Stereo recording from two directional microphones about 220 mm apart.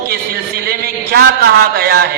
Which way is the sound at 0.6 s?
45° right (ahead or behind).